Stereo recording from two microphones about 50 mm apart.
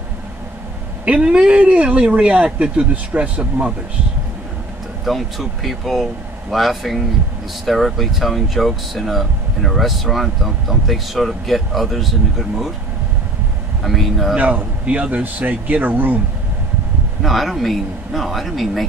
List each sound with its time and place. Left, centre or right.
1.0 s speech: right
5.0 s speech: centre
13.8 s speech: centre
14.3 s a man's voice: right
17.2 s speech: centre